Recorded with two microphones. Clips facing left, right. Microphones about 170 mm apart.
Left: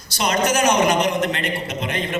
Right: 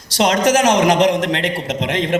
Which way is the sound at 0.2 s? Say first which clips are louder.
Right 5 dB; 90° right.